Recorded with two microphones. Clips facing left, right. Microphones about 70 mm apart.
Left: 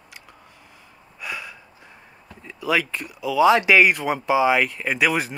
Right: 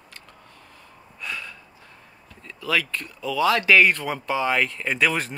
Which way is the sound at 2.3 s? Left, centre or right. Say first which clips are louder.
Left 4 dB; centre.